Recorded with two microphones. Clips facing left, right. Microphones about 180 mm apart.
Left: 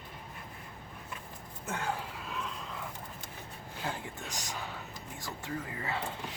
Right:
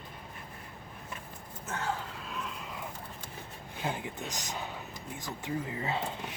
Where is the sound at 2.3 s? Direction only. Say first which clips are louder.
Left 1 dB; centre (ahead or behind).